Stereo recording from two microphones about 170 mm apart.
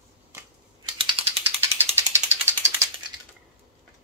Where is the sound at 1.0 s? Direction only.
35° right (ahead or behind).